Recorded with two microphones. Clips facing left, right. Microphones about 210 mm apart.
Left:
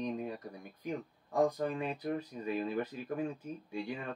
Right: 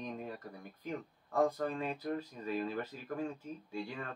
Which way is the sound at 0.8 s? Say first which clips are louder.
Left 3 dB; 15° left (ahead or behind).